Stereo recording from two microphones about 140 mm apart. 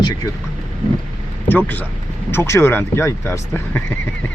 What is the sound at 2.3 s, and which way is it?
Speech, 20° left (ahead or behind).